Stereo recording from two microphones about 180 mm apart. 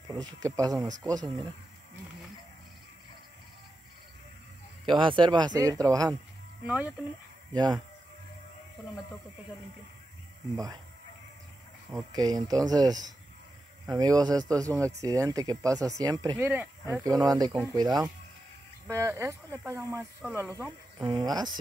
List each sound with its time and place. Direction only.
0.1 s speech: 20° right (ahead or behind)
4.8 s speech: 25° right (ahead or behind)
6.6 s speech: 10° right (ahead or behind)
7.5 s speech: 25° right (ahead or behind)
10.5 s speech: 20° right (ahead or behind)
12.1 s speech: 20° right (ahead or behind)
16.4 s speech: 10° right (ahead or behind)
20.0 s speech: centre (ahead or behind)
21.0 s speech: 25° right (ahead or behind)